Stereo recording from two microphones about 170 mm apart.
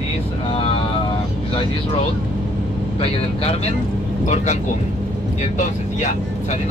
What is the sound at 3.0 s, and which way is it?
Speech, 35° left (ahead or behind).